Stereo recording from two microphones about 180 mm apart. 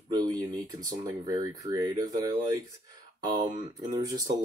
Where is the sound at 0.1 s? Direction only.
20° right (ahead or behind).